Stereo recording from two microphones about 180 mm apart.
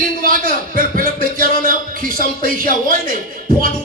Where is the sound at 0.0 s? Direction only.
50° right (ahead or behind).